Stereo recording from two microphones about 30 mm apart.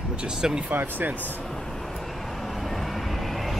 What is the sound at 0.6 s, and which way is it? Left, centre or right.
Speech, right.